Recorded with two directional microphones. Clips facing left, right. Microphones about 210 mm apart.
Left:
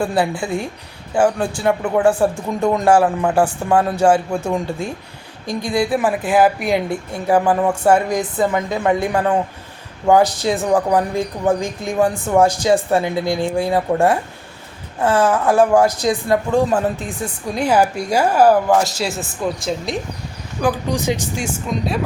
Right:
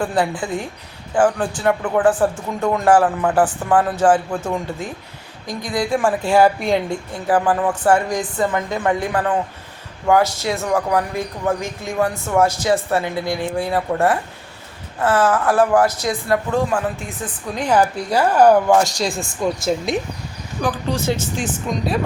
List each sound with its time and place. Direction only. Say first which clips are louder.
0.0 s speech: left 1 dB; 10° left (ahead or behind)
20.6 s speech: left 3 dB; 10° left (ahead or behind)